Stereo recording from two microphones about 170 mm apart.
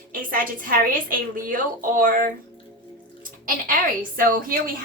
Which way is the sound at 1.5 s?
55° right (ahead or behind).